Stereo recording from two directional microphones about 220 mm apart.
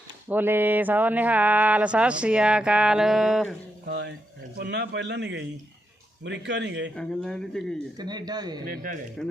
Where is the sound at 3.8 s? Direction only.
50° right (ahead or behind).